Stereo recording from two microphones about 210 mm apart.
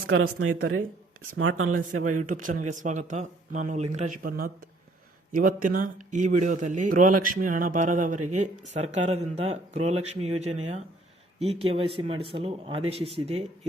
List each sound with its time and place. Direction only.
0.1 s speech: 80° right
2.0 s a man's voice: 40° right (ahead or behind)